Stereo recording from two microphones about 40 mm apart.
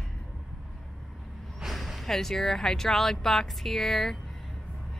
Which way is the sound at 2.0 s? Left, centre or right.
Centre.